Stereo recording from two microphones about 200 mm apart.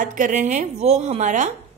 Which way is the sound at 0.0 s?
40° right (ahead or behind).